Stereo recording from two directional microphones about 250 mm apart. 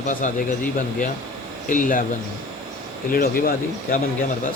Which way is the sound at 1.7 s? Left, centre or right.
Left.